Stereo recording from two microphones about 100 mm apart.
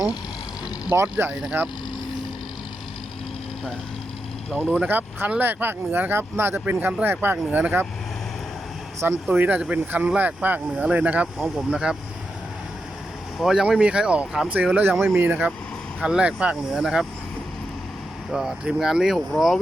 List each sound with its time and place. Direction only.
1.3 s speech: 5° right (ahead or behind)
4.5 s speech: 5° left (ahead or behind)
4.8 s speech: 15° right (ahead or behind)
9.3 s speech: 15° right (ahead or behind)
13.4 s speech: 5° right (ahead or behind)
18.3 s speech: 5° right (ahead or behind)